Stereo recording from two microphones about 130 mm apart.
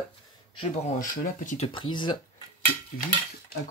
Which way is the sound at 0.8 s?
70° left (ahead or behind).